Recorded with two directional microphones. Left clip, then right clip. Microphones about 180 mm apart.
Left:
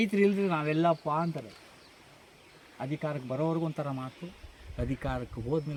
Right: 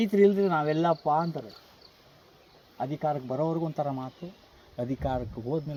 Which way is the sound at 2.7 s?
20° left (ahead or behind).